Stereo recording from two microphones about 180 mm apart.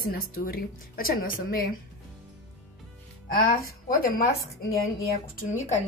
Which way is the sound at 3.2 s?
55° left (ahead or behind).